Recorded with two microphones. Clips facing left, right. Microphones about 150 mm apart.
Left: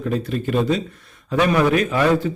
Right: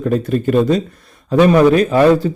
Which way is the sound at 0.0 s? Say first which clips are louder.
Right 7 dB; 45° right (ahead or behind).